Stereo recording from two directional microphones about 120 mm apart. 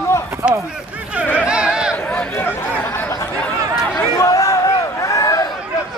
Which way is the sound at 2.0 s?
15° left (ahead or behind).